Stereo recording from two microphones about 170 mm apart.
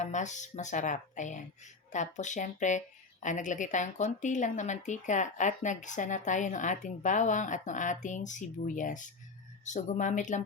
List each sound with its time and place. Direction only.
0.0 s speech: 45° left (ahead or behind)